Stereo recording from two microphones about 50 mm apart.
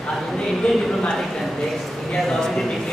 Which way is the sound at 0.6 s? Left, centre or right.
Left.